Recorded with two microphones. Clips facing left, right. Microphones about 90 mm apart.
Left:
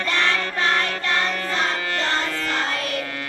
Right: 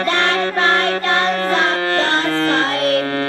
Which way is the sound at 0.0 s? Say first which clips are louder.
Right 6 dB; 55° right (ahead or behind).